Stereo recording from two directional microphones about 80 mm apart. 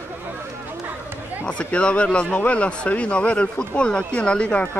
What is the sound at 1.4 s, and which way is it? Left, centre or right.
Speech, centre.